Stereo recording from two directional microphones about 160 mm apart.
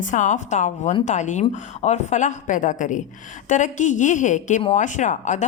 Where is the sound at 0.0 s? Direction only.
50° left (ahead or behind).